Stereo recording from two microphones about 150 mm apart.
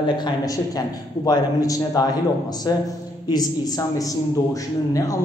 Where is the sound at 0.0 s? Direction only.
25° left (ahead or behind).